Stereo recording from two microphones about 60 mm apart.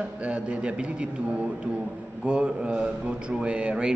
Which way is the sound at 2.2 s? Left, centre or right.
Centre.